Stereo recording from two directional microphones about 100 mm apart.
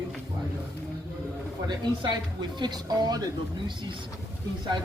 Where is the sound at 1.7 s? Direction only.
45° right (ahead or behind).